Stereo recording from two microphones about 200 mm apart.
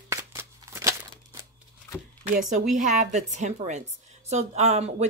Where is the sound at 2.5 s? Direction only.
35° right (ahead or behind).